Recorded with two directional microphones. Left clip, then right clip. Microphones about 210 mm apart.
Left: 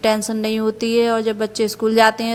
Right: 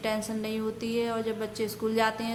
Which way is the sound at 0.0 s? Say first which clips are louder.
Left 12 dB; 40° left (ahead or behind).